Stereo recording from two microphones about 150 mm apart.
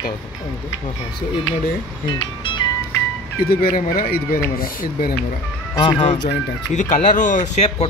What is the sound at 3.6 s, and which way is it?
Speech, 65° left (ahead or behind).